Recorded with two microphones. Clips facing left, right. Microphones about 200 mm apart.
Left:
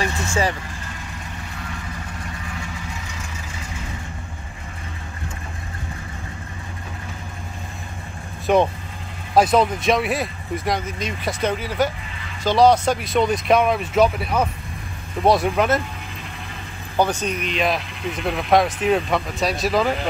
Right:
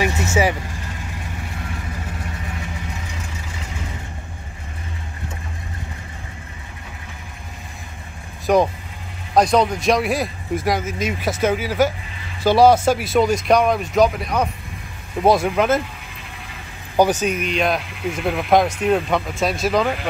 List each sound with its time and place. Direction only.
0.0 s vehicle: 15° right (ahead or behind)
8.5 s speech: centre (ahead or behind)
16.9 s speech: 10° right (ahead or behind)